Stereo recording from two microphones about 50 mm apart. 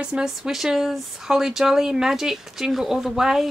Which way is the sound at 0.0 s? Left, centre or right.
Centre.